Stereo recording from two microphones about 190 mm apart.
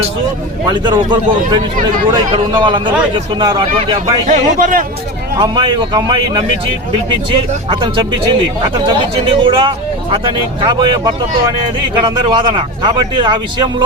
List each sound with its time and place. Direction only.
0.7 s speech: 25° right (ahead or behind)
4.3 s speech: 45° right (ahead or behind)
5.4 s speech: 25° right (ahead or behind)